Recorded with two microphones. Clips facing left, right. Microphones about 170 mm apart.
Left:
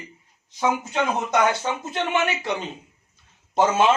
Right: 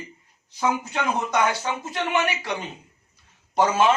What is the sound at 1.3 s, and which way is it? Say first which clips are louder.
A man's voice: left 2 dB; 20° left (ahead or behind).